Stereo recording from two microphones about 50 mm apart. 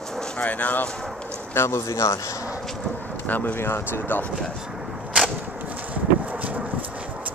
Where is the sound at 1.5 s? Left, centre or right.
Left.